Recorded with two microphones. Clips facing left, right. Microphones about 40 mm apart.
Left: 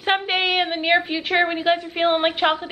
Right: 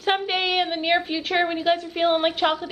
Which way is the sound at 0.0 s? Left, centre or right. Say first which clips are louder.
Left 2 dB; centre.